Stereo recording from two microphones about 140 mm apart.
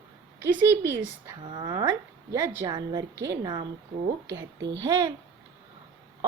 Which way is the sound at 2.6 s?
30° right (ahead or behind).